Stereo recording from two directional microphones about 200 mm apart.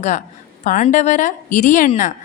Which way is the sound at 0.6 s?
40° left (ahead or behind).